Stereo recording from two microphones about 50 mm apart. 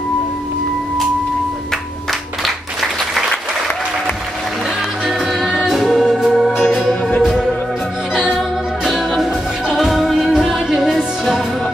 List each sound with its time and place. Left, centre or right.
2.4 s applause: centre
5.0 s music: centre